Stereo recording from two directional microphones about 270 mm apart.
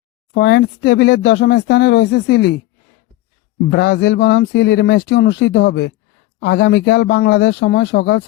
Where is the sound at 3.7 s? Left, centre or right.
Left.